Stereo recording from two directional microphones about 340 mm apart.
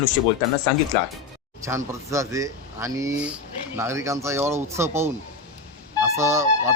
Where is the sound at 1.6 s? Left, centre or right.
Centre.